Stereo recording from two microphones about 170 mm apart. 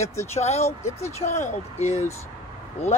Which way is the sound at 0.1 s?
15° left (ahead or behind).